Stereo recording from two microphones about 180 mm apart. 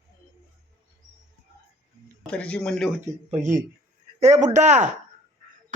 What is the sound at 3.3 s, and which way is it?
Speech, 40° right (ahead or behind).